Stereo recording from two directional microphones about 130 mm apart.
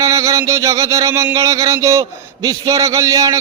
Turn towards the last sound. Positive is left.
turn(degrees=-25)  # may be behind; listen again after turning